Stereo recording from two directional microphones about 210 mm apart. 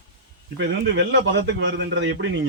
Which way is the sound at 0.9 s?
60° right (ahead or behind).